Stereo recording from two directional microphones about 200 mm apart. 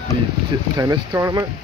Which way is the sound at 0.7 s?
15° right (ahead or behind).